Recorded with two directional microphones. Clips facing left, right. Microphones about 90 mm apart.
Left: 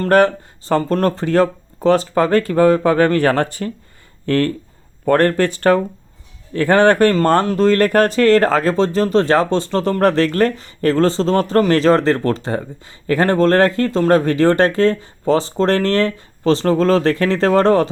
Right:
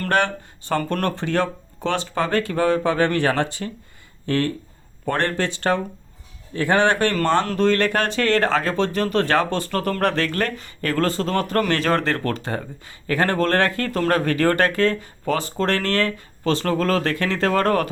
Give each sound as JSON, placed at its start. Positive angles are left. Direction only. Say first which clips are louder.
{"t": 0.1, "sound": "speech", "louder": "left 8 dB", "side_deg": 35}